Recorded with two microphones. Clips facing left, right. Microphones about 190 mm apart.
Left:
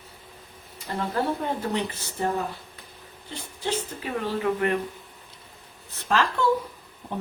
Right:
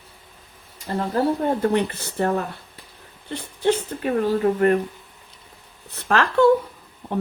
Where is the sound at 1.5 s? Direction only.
60° right (ahead or behind); by 4.8 s 40° right (ahead or behind).